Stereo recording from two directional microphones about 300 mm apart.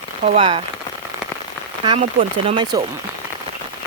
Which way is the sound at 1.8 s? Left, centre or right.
Centre.